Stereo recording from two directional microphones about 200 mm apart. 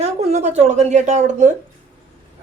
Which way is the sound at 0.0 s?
30° right (ahead or behind).